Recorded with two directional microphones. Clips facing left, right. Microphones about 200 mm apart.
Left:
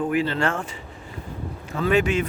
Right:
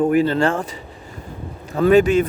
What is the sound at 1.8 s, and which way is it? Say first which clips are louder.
Speech: right 8 dB; 40° right (ahead or behind).